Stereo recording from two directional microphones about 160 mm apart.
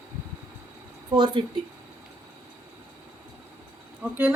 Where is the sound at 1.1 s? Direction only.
30° right (ahead or behind).